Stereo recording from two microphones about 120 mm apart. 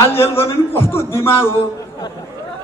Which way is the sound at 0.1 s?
20° left (ahead or behind).